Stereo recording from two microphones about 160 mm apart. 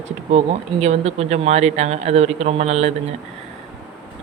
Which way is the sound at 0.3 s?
45° right (ahead or behind).